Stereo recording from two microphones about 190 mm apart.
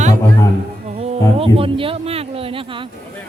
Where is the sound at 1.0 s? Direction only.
30° right (ahead or behind).